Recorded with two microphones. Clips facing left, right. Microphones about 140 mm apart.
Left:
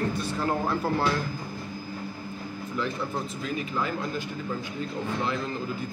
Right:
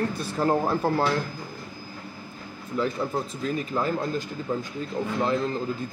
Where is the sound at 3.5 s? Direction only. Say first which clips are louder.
Right 3 dB; 40° right (ahead or behind).